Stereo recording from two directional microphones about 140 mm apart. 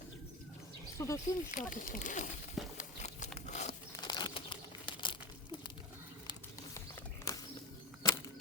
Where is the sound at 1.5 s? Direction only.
70° left (ahead or behind).